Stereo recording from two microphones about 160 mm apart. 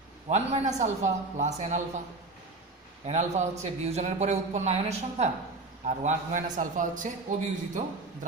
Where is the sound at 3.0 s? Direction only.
45° right (ahead or behind).